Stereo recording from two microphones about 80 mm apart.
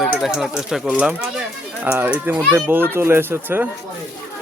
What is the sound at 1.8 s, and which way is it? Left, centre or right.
Speech, centre.